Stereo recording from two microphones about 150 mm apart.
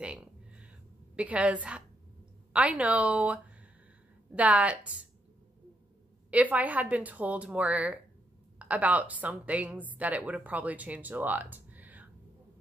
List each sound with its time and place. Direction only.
0.0 s a sound: 10° right (ahead or behind)
2.5 s a woman's voice: 10° right (ahead or behind)
4.4 s a woman's voice: 10° right (ahead or behind)
6.3 s a woman's voice: 10° right (ahead or behind)